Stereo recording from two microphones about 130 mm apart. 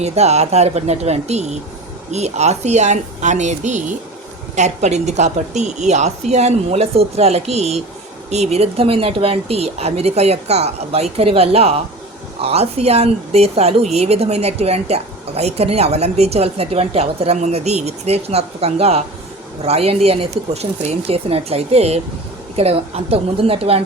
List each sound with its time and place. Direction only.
0.0 s a woman's voice: 55° right (ahead or behind)